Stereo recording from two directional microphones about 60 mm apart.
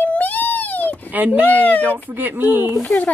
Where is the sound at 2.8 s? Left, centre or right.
Left.